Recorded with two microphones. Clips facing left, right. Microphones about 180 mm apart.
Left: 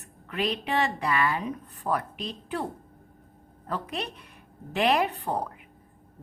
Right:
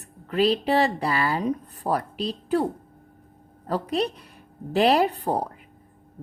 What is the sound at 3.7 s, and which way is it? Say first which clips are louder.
A woman's voice: right 8 dB; 35° right (ahead or behind).